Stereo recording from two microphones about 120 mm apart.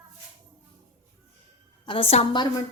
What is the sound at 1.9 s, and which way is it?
Speech, 55° left (ahead or behind).